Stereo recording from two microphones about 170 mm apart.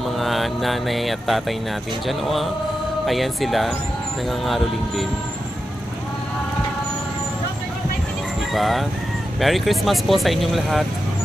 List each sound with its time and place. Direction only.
0.2 s speech: centre (ahead or behind)
8.5 s speech: centre (ahead or behind)